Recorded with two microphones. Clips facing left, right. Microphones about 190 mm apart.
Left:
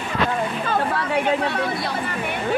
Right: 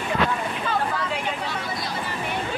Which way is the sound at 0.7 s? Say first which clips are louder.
Left 1 dB; 60° left (ahead or behind).